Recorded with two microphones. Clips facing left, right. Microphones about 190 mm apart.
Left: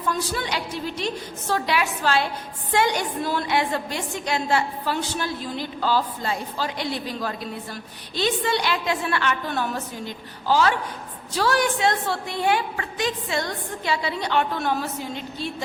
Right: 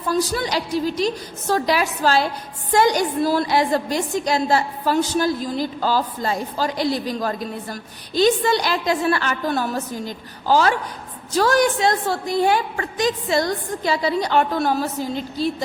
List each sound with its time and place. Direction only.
0.1 s a woman's voice: 40° right (ahead or behind)